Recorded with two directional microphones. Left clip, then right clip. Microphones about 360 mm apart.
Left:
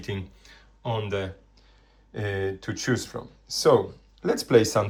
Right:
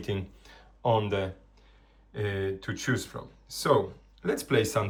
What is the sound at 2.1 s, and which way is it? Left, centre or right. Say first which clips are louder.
Speech: left 2 dB; centre.